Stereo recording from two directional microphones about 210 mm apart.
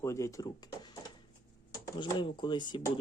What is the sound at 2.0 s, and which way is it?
Speech, 20° left (ahead or behind).